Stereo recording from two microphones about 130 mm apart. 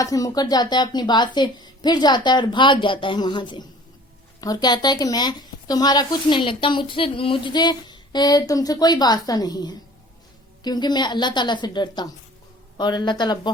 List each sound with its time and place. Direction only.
0.0 s speech: 25° left (ahead or behind)